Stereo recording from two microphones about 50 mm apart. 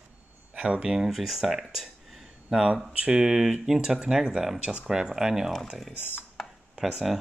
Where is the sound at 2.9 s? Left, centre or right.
Centre.